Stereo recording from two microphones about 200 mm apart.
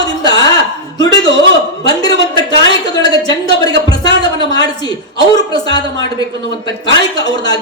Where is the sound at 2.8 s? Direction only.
20° left (ahead or behind).